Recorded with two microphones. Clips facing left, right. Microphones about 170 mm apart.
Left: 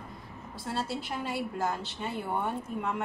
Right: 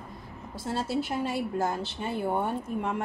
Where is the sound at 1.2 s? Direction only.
25° right (ahead or behind).